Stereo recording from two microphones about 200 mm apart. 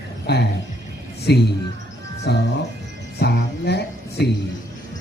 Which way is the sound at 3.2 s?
55° left (ahead or behind).